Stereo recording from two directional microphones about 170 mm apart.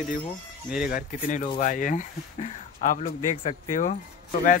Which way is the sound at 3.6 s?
50° left (ahead or behind).